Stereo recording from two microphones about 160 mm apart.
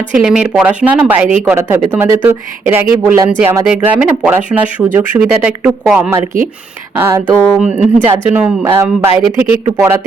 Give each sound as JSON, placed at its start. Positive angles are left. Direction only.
{"t": 0.1, "sound": "speech", "side_deg": -5}